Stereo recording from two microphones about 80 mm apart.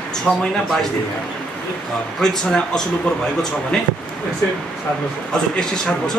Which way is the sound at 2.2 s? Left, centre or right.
Centre.